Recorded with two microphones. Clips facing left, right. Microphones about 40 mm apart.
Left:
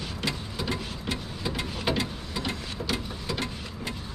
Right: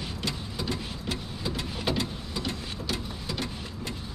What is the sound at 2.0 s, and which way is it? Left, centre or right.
Vehicle, centre.